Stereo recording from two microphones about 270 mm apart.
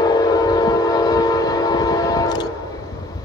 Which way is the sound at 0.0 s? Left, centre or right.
Centre.